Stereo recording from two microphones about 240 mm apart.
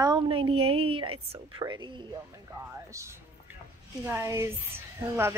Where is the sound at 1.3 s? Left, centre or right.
Centre.